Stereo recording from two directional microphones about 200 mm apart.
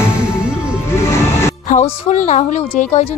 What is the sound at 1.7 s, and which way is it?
A woman's voice, 35° left (ahead or behind).